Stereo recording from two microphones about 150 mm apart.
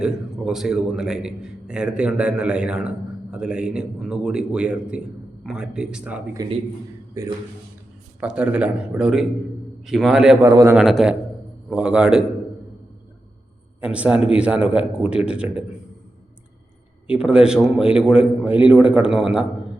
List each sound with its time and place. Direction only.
0.0 s a man's voice: 5° right (ahead or behind)
7.2 s a man's voice: 20° right (ahead or behind)
8.2 s a man's voice: 5° right (ahead or behind)
10.4 s a man's voice: 20° right (ahead or behind)
10.8 s a man's voice: centre (ahead or behind)
13.8 s speech: 10° right (ahead or behind)
17.1 s a man's voice: 5° right (ahead or behind)